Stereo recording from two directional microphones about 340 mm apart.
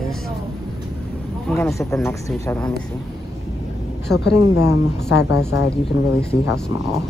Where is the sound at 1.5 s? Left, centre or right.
Centre.